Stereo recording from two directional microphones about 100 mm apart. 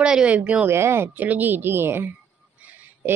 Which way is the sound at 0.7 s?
25° right (ahead or behind).